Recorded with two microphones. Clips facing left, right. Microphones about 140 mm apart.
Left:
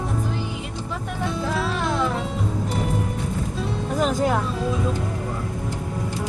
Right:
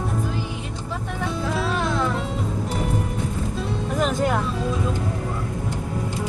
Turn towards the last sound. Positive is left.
turn(degrees=0)  # may be behind; listen again after turning